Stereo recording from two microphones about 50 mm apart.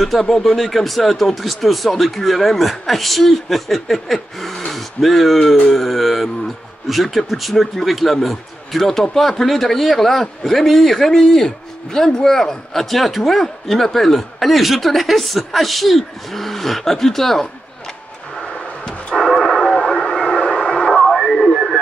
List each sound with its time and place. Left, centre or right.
0.0 s a man's voice: centre
18.4 s a sound: centre
19.2 s radio: centre